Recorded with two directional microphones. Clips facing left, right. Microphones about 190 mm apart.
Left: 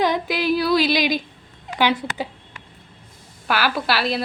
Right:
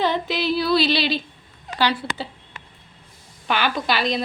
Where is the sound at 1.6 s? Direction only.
20° left (ahead or behind).